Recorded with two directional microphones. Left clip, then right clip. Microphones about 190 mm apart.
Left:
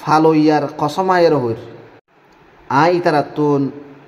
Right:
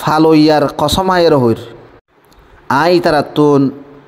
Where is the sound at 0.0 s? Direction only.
45° right (ahead or behind).